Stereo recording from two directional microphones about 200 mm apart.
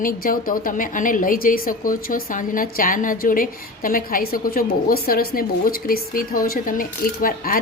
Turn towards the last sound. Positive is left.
turn(degrees=45)  # may be behind; listen again after turning